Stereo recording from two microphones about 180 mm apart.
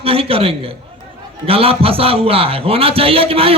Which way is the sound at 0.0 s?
30° right (ahead or behind).